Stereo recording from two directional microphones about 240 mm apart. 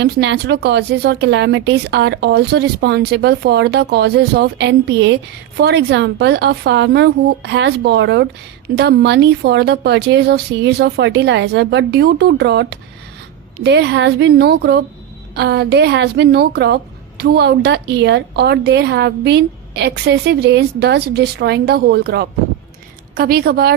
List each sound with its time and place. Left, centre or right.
0.0 s a woman's voice: right